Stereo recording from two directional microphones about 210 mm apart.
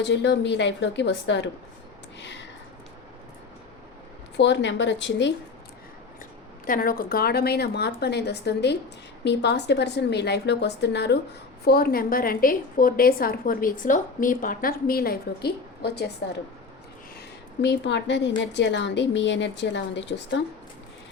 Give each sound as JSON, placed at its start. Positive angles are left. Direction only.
{"t": 0.1, "sound": "a woman's voice", "side_deg": 55}
{"t": 2.1, "sound": "a sound", "side_deg": 55}
{"t": 4.4, "sound": "a woman's voice", "side_deg": 55}
{"t": 6.7, "sound": "a woman's voice", "side_deg": 40}
{"t": 17.2, "sound": "a woman's voice", "side_deg": 55}